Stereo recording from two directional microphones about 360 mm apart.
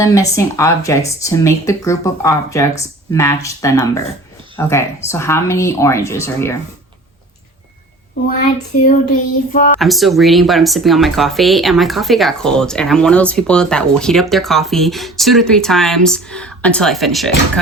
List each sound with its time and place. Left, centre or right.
0.0 s speech: centre
8.8 s child singing: left
9.7 s speech: centre